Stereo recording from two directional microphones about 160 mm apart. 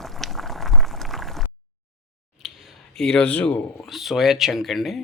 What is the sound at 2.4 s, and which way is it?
Speech, centre (ahead or behind).